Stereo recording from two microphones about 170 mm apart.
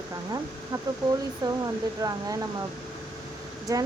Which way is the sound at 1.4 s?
25° right (ahead or behind).